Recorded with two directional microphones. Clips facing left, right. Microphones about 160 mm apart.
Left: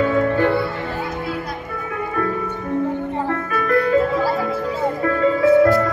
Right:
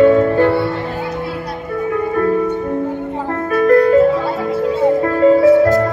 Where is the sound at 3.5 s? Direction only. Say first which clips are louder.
Right 9 dB; 40° right (ahead or behind).